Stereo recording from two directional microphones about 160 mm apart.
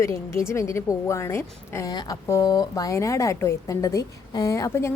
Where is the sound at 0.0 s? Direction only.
20° left (ahead or behind).